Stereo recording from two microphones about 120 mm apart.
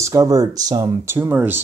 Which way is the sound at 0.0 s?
25° right (ahead or behind).